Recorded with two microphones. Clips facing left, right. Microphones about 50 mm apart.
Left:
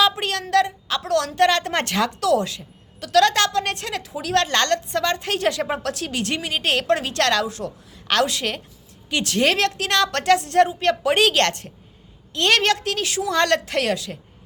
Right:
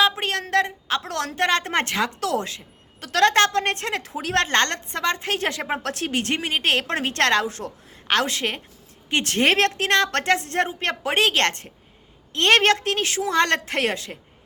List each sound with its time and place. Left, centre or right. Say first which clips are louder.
0.0 s a sound: left 1 dB; right
0.5 s a woman's voice: left 3 dB; right
2.2 s a woman's voice: left 5 dB; right
8.0 s a woman's voice: left 1 dB; right